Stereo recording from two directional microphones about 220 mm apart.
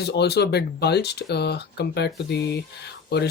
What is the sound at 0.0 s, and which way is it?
Speech, 50° left (ahead or behind).